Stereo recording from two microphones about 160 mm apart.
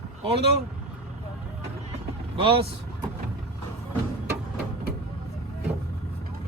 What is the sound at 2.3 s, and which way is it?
Speech, 35° right (ahead or behind).